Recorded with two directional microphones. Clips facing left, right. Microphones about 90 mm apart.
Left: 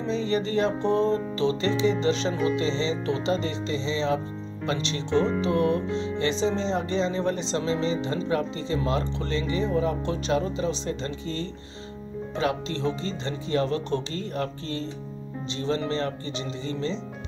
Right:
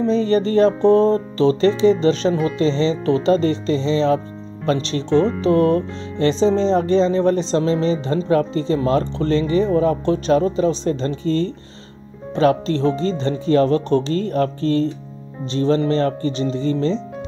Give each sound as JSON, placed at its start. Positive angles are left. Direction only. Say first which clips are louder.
{"t": 0.0, "sound": "speech", "louder": "right 9 dB", "side_deg": -45}